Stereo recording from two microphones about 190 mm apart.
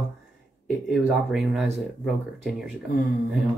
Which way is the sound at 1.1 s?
Centre (ahead or behind).